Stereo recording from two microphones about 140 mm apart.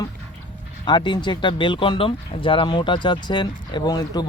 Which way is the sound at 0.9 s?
35° left (ahead or behind).